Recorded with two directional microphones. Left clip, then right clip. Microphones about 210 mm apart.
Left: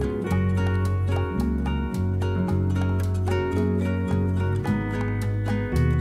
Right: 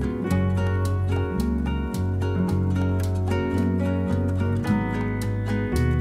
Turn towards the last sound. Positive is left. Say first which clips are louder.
# right 1 dB
turn(degrees=0)  # may be behind; listen again after turning